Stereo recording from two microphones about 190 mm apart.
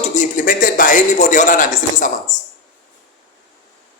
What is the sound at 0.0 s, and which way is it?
A man's voice, 40° left (ahead or behind).